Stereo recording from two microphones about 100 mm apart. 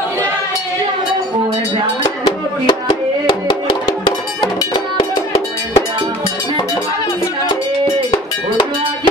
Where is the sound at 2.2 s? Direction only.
55° left (ahead or behind).